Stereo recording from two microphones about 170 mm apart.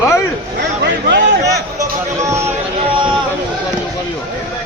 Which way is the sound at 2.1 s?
15° right (ahead or behind).